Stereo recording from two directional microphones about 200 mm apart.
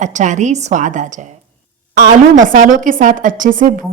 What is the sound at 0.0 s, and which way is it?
A woman's voice, 35° right (ahead or behind).